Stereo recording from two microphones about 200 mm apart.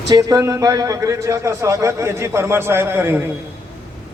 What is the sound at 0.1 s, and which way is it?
A man's voice, 15° right (ahead or behind).